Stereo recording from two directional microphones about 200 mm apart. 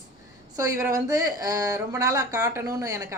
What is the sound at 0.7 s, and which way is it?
Speech, 15° right (ahead or behind).